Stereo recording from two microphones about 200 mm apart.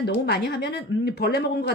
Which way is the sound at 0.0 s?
55° left (ahead or behind).